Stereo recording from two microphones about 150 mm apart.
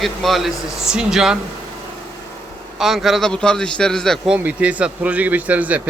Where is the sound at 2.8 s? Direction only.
Centre (ahead or behind).